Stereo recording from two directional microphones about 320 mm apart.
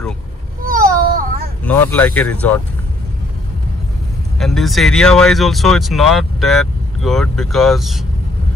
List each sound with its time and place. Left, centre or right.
0.7 s a sound: right
1.6 s speech: centre
4.4 s speech: centre